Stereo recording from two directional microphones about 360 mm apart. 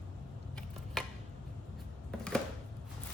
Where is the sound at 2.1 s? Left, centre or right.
Centre.